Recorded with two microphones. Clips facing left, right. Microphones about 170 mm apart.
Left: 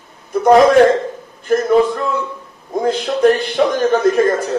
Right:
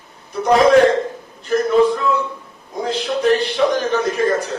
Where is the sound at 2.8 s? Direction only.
50° left (ahead or behind).